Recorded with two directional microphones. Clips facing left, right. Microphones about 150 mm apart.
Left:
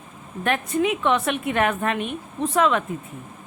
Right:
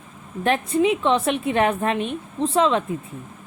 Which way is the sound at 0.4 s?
30° right (ahead or behind).